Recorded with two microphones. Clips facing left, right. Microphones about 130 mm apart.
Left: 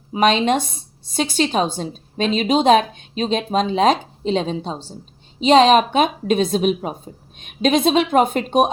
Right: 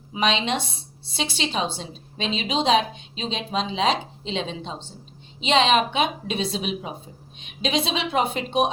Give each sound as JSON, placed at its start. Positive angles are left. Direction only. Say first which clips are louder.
{"t": 0.1, "sound": "a woman's voice", "louder": "left 7 dB", "side_deg": 50}